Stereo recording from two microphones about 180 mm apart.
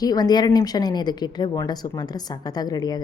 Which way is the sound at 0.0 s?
20° left (ahead or behind).